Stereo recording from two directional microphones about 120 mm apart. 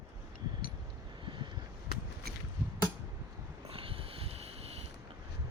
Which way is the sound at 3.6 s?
50° right (ahead or behind).